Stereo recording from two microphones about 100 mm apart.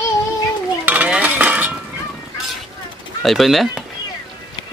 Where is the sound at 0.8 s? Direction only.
15° right (ahead or behind).